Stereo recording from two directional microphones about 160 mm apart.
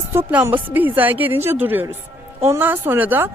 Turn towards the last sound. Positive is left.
turn(degrees=-15)  # may be behind; listen again after turning